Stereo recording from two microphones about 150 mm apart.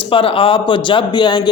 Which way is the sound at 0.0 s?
35° left (ahead or behind).